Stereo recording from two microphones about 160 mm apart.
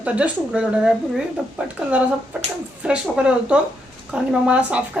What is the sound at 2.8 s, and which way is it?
A woman's voice, 5° right (ahead or behind).